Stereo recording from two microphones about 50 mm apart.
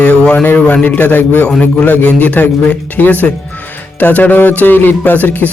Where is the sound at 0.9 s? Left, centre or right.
Left.